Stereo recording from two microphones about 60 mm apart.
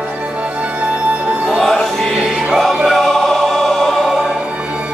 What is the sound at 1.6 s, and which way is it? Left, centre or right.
Music, centre.